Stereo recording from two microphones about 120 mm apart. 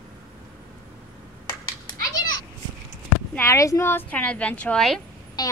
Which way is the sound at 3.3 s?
25° left (ahead or behind).